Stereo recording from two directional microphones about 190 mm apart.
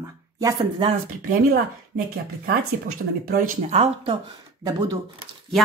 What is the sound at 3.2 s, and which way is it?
Speech, 45° right (ahead or behind).